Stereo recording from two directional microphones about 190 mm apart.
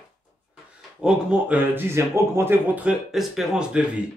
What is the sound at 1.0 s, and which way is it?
Speech, 5° right (ahead or behind).